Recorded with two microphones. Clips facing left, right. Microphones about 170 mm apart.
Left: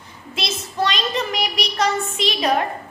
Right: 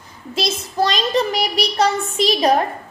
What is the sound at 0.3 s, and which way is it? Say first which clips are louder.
A child's voice: right 4 dB; 35° right (ahead or behind).